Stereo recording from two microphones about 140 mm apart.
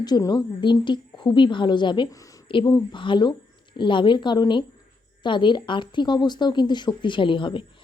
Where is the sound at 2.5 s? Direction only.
35° left (ahead or behind).